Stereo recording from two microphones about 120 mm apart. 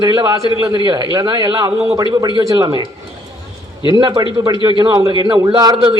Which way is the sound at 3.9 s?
40° right (ahead or behind).